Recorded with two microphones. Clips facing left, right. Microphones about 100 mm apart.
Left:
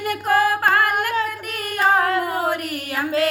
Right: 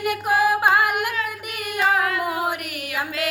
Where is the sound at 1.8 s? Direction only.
35° left (ahead or behind).